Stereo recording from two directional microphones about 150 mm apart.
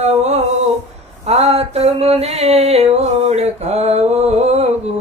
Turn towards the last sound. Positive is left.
turn(degrees=-45)  # may be behind; listen again after turning